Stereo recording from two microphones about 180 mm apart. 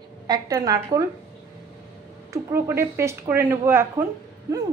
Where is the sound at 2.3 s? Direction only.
15° right (ahead or behind).